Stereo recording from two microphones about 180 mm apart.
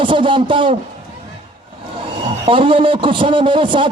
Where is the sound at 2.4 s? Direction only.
30° right (ahead or behind).